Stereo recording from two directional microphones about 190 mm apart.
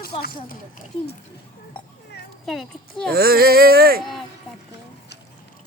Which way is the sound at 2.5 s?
Centre (ahead or behind).